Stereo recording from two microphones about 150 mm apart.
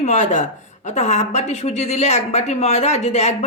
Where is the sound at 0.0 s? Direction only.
55° left (ahead or behind).